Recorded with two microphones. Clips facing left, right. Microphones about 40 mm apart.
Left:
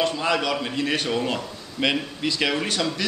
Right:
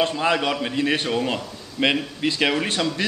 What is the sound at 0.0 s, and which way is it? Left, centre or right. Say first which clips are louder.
Speech: right 2 dB; centre.